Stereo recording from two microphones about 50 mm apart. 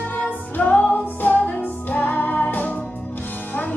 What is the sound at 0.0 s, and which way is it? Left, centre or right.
Music, left.